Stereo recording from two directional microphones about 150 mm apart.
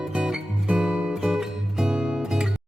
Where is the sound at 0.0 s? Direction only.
5° right (ahead or behind).